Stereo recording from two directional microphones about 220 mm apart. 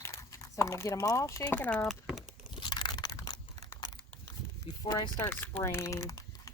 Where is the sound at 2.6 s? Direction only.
20° left (ahead or behind).